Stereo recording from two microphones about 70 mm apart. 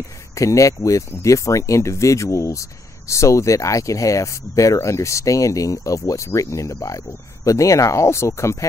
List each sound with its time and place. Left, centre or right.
0.4 s speech: left